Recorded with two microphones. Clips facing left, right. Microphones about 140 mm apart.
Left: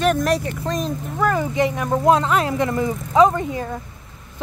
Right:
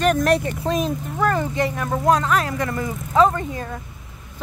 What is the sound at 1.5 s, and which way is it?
Speech, 15° left (ahead or behind).